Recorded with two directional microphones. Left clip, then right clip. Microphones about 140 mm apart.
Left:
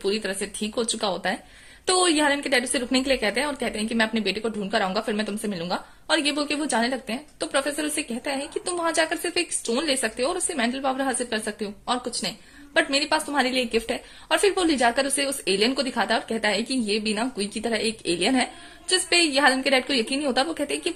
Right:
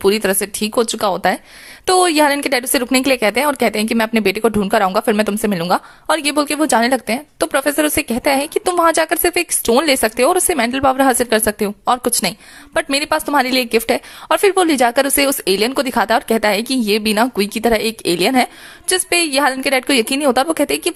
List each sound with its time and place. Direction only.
0.0 s speech: 40° right (ahead or behind)